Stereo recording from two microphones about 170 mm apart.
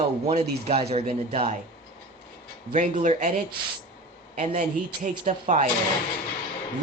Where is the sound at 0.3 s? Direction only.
40° right (ahead or behind).